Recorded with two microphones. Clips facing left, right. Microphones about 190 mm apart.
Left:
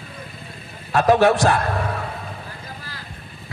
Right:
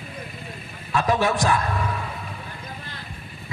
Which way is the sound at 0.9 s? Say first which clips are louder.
Left 6 dB; 60° left (ahead or behind).